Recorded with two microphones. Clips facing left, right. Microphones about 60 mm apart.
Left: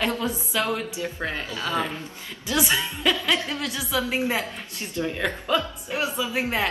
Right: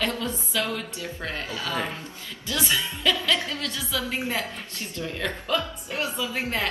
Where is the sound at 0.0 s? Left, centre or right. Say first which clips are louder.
Left 2 dB; left.